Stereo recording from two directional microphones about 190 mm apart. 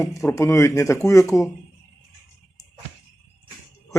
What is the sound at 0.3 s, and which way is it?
Speech, 15° left (ahead or behind).